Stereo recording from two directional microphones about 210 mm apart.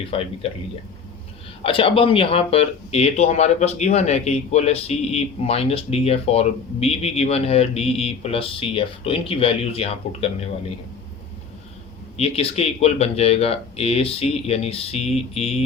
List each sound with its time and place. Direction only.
0.1 s speech: 25° left (ahead or behind)
1.6 s speech: 25° left (ahead or behind)
12.1 s speech: 30° left (ahead or behind)